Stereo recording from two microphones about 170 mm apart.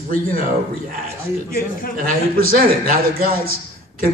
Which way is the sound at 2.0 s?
55° right (ahead or behind).